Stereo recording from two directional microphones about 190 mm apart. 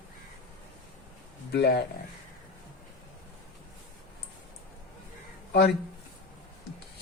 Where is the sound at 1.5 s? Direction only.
60° left (ahead or behind).